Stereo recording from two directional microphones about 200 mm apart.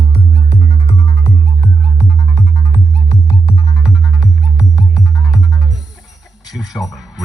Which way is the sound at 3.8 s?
5° right (ahead or behind).